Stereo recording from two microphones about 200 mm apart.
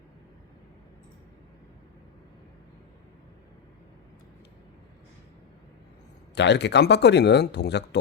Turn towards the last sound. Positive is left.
turn(degrees=55)  # may be behind; listen again after turning